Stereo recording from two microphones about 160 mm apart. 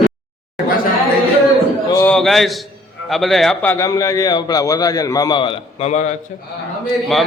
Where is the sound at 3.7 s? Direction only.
20° left (ahead or behind); by 6.1 s 45° left (ahead or behind).